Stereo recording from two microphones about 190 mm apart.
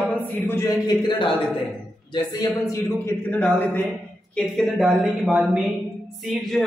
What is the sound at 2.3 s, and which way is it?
A man's voice, 15° left (ahead or behind).